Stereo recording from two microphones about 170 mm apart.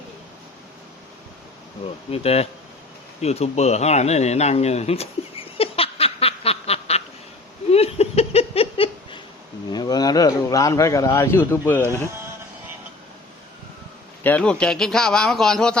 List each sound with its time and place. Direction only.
2.0 s speech: 35° left (ahead or behind)
3.2 s a sound: 40° left (ahead or behind)
9.7 s a man's voice: 25° left (ahead or behind)
14.3 s a man's voice: 5° left (ahead or behind)